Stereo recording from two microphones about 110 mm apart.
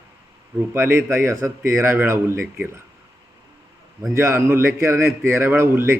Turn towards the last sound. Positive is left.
turn(degrees=-20)  # may be behind; listen again after turning